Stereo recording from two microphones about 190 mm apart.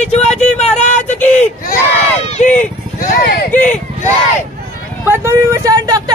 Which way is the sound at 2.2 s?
35° left (ahead or behind).